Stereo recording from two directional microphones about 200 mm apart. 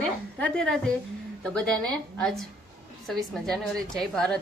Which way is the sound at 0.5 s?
5° left (ahead or behind).